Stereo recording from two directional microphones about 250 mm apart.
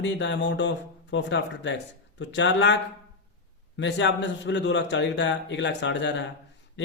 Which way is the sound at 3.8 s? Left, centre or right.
Left.